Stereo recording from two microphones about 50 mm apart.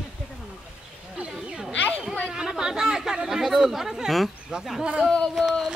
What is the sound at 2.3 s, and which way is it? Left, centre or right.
Chatter, centre.